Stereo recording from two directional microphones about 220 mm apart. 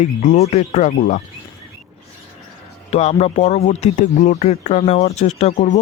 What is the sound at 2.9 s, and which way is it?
Speech, 30° left (ahead or behind).